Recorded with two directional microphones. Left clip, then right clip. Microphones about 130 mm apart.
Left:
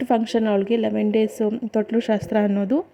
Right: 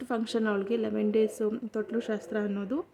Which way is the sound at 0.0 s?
30° left (ahead or behind).